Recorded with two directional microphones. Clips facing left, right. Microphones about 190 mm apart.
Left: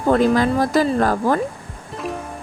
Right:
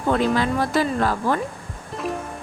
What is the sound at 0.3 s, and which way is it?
Speech, 40° left (ahead or behind).